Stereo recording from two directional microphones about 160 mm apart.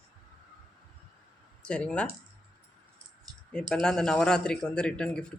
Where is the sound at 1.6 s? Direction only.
5° left (ahead or behind).